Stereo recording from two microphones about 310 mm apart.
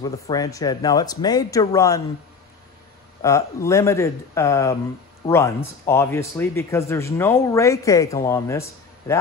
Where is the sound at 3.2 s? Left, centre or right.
Centre.